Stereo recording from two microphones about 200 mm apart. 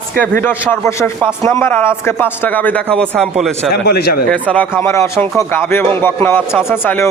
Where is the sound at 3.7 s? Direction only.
50° left (ahead or behind).